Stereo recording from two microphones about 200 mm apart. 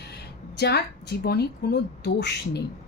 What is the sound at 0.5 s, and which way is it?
Speech, 55° left (ahead or behind).